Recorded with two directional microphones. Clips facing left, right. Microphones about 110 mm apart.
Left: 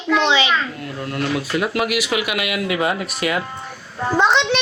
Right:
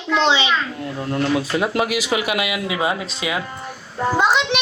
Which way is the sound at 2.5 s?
20° right (ahead or behind).